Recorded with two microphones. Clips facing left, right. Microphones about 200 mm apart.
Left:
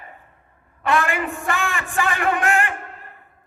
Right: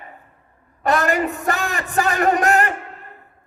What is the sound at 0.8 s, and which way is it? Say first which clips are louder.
A man's voice: right 3 dB; 40° right (ahead or behind).